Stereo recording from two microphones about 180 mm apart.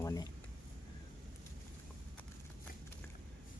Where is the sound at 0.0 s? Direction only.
20° left (ahead or behind).